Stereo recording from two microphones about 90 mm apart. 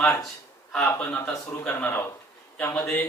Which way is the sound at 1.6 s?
25° left (ahead or behind).